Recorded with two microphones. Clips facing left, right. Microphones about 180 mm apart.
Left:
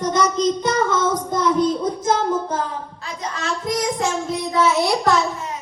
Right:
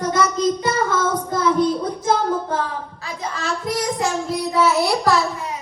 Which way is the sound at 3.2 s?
5° right (ahead or behind).